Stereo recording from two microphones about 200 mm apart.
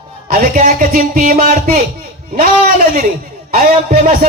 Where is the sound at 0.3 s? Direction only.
45° right (ahead or behind).